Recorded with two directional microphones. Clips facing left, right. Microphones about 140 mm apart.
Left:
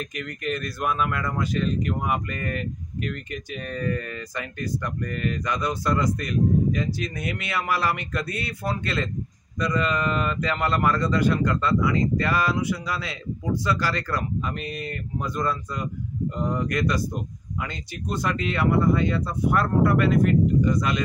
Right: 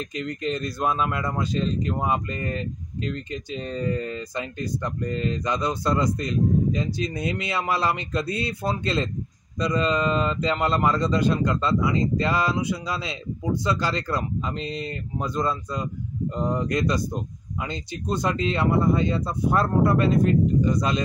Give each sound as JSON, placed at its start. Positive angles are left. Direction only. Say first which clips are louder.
{"t": 0.0, "sound": "speech", "louder": "right 2 dB", "side_deg": -25}